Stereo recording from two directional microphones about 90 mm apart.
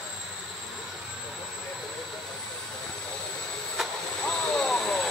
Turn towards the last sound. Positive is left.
turn(degrees=5)  # may be behind; listen again after turning